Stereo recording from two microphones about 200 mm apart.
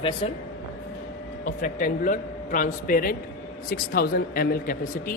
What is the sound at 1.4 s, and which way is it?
A man's voice, 40° left (ahead or behind).